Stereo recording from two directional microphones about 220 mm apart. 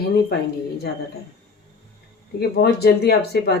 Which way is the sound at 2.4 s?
45° left (ahead or behind).